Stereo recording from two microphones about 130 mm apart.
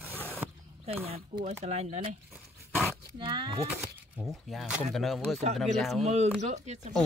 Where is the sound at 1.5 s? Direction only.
55° right (ahead or behind).